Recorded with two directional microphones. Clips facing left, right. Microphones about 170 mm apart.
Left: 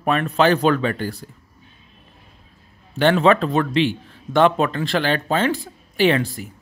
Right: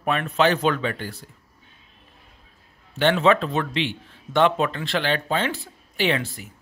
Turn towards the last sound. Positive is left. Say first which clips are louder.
# left 6 dB
turn(degrees=40)  # may be behind; listen again after turning